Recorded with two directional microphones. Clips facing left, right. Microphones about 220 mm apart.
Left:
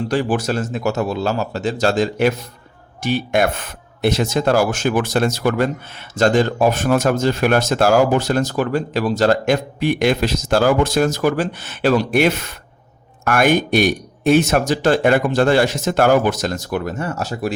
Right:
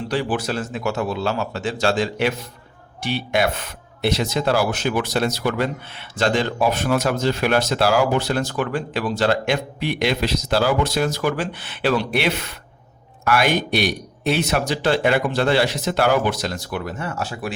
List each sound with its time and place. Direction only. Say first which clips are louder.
0.1 s a man's voice: left 2 dB; 45° left (ahead or behind)